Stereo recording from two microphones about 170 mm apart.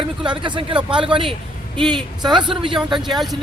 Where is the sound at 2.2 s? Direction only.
25° right (ahead or behind).